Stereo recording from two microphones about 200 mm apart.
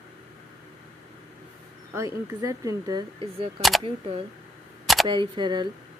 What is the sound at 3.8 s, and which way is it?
Speech, 30° right (ahead or behind).